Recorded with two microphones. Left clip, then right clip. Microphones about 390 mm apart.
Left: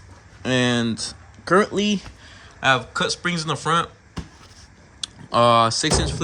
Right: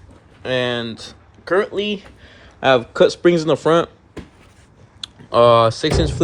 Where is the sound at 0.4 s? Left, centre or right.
Centre.